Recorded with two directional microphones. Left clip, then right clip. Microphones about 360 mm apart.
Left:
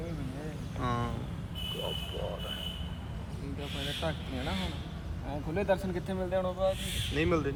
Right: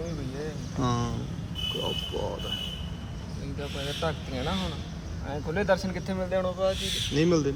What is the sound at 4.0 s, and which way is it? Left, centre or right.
Speech, right.